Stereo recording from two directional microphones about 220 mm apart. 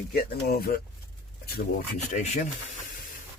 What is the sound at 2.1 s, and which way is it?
Speech, 35° left (ahead or behind).